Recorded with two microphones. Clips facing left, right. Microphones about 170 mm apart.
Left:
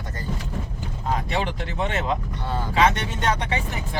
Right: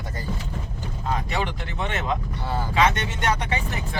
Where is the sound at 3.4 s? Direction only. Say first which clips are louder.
Left 1 dB; 30° left (ahead or behind).